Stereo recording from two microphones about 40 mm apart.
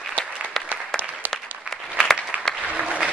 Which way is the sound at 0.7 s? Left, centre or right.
Right.